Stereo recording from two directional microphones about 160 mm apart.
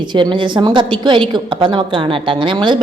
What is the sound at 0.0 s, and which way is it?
A woman's voice, 30° right (ahead or behind).